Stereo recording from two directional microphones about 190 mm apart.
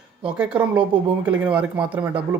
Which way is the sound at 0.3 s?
10° right (ahead or behind).